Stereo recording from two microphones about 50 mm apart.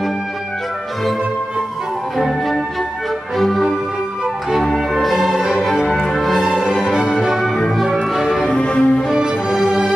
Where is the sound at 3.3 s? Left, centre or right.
Centre.